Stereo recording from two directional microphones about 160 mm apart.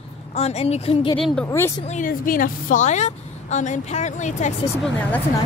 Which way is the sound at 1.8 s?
55° left (ahead or behind).